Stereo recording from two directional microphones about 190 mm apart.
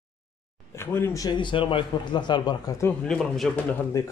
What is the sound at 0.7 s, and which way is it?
A man's voice, 10° left (ahead or behind).